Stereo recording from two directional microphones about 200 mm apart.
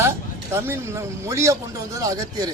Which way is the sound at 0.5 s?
15° right (ahead or behind).